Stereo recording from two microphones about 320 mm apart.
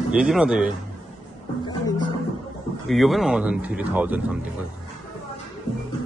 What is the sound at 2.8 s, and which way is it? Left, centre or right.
Speech, centre.